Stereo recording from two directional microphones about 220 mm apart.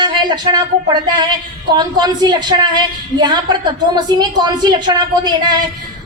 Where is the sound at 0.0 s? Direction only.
20° right (ahead or behind).